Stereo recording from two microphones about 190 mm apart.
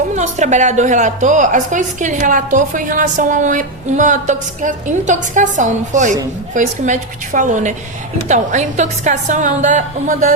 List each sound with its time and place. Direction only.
0.2 s a woman's voice: 40° right (ahead or behind)